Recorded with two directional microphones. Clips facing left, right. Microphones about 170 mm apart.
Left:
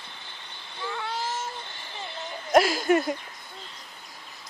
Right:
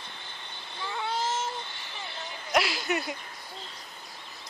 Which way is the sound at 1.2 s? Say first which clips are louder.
Right 2 dB; 20° right (ahead or behind).